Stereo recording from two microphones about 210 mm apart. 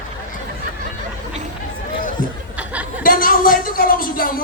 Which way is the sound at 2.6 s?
5° right (ahead or behind).